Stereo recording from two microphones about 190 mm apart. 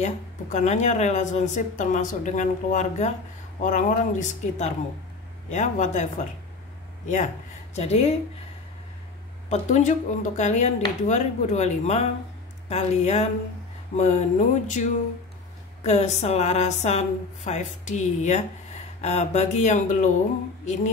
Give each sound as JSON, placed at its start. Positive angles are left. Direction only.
{"t": 0.0, "sound": "speech", "side_deg": 40}
{"t": 7.7, "sound": "speech", "side_deg": 35}
{"t": 9.5, "sound": "speech", "side_deg": 40}
{"t": 20.6, "sound": "music", "side_deg": 35}